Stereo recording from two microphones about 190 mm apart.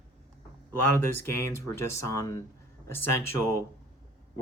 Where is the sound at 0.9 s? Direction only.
15° left (ahead or behind).